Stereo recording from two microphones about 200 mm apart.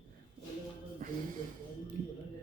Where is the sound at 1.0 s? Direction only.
45° right (ahead or behind).